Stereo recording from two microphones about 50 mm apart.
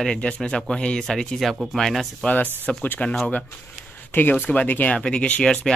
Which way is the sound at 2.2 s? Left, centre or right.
Centre.